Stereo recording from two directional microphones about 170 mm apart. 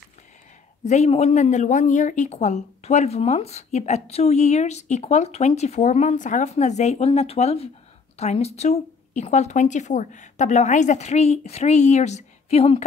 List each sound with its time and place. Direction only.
0.8 s speech: 40° left (ahead or behind)